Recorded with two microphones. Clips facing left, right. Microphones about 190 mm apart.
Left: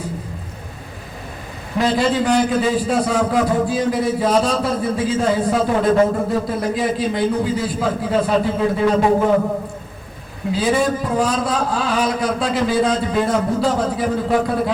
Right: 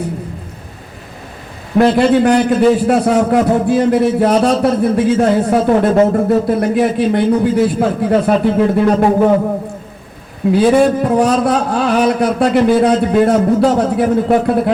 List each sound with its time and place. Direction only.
1.8 s a man's voice: 60° right (ahead or behind)
10.5 s a man's voice: 60° right (ahead or behind)